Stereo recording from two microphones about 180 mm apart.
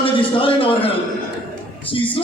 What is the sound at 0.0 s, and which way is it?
Speech, 30° left (ahead or behind).